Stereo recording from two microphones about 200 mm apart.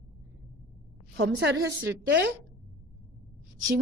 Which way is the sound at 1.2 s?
65° right (ahead or behind).